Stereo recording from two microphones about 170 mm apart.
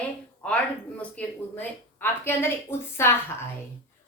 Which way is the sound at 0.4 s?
5° left (ahead or behind).